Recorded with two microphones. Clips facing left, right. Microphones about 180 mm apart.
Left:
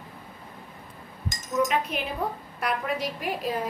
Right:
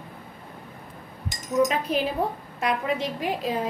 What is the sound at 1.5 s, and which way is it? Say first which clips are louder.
Speech: right 3 dB; 35° right (ahead or behind).